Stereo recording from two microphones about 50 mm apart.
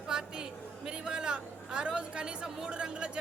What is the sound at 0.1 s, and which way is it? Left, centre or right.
Speech, centre.